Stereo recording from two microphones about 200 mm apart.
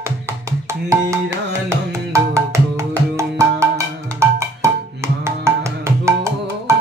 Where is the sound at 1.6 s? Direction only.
15° right (ahead or behind).